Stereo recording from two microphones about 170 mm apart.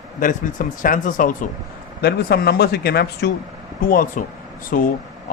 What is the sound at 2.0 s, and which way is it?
Speech, 65° left (ahead or behind).